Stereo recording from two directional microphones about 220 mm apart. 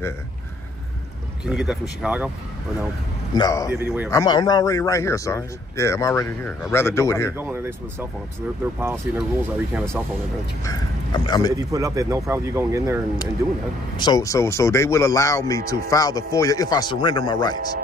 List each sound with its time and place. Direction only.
1.4 s speech: 5° right (ahead or behind)
3.3 s speech: 15° left (ahead or behind)
3.7 s speech: 10° right (ahead or behind)
4.1 s speech: 15° left (ahead or behind)
7.3 s speech: 10° right (ahead or behind)
10.6 s speech: 15° left (ahead or behind)
11.5 s speech: 15° right (ahead or behind)
13.9 s speech: 20° left (ahead or behind)